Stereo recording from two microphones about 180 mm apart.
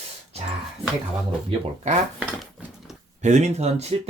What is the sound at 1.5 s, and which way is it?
Speech, 35° right (ahead or behind).